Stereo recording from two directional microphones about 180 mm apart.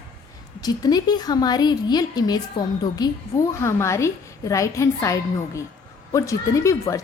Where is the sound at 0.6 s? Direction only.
20° left (ahead or behind).